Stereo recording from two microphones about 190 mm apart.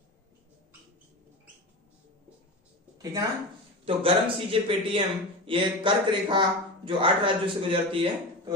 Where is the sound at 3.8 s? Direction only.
30° right (ahead or behind).